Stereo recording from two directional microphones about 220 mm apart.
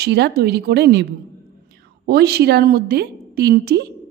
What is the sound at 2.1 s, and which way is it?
A woman's voice, 45° right (ahead or behind).